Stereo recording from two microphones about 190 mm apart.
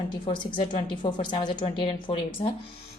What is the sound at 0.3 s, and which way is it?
Speech, 25° left (ahead or behind).